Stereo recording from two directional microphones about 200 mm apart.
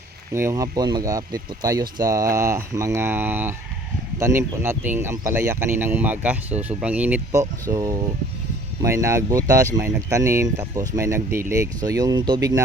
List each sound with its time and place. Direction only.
0.3 s speech: 15° right (ahead or behind)
7.7 s speech: 20° right (ahead or behind)